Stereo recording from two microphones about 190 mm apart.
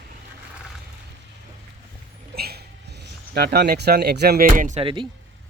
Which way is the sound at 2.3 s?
55° right (ahead or behind).